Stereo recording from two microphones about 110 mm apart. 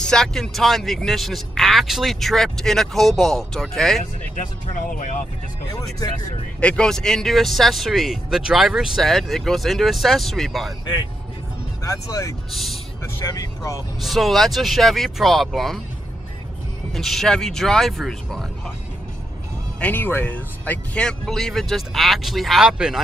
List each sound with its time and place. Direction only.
0.0 s speech: 5° left (ahead or behind)
5.7 s speech: 35° left (ahead or behind)
6.6 s speech: 10° left (ahead or behind)
11.8 s speech: 30° left (ahead or behind)
14.0 s speech: centre (ahead or behind)
16.9 s speech: centre (ahead or behind)
19.8 s speech: 15° left (ahead or behind); by 23.0 s 5° right (ahead or behind)